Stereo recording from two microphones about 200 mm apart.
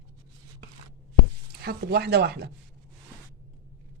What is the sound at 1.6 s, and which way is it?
Speech, 50° right (ahead or behind).